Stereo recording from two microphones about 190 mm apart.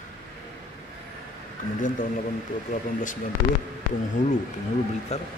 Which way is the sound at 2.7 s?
45° left (ahead or behind).